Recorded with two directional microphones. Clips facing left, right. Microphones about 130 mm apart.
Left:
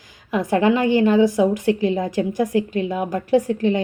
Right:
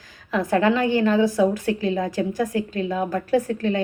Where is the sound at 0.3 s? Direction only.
20° left (ahead or behind).